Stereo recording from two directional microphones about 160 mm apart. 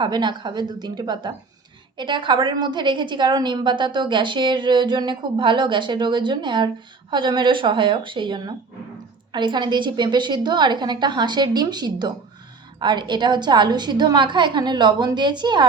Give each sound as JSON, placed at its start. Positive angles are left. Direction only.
{"t": 0.0, "sound": "a woman's voice", "side_deg": -30}